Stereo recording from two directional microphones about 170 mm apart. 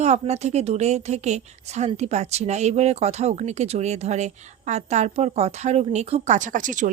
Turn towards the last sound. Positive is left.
turn(degrees=-50)  # may be behind; listen again after turning